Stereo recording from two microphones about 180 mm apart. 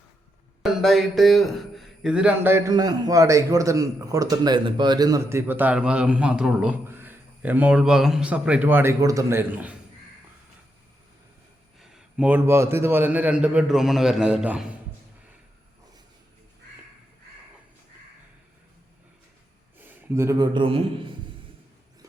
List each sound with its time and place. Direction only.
0.6 s speech: centre (ahead or behind)
11.8 s speech: centre (ahead or behind)
19.8 s a man's voice: 15° right (ahead or behind); by 20.8 s 30° right (ahead or behind)